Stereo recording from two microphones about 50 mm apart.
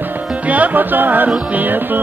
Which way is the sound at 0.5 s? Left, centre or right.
Right.